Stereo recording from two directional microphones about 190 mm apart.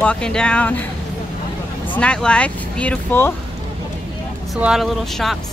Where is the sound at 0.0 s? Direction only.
5° left (ahead or behind).